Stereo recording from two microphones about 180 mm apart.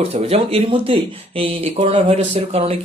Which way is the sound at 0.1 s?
35° right (ahead or behind).